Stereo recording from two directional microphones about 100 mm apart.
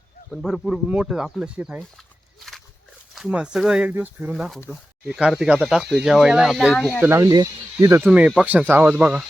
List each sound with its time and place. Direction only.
0.3 s speech: centre (ahead or behind)
3.2 s speech: 10° right (ahead or behind)
7.0 s speech: 30° right (ahead or behind); by 9.2 s 10° right (ahead or behind)